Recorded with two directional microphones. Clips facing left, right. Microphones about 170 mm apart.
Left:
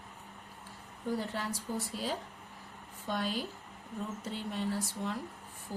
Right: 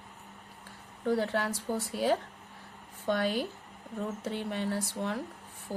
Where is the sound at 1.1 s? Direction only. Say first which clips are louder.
Right 6 dB; 70° right (ahead or behind).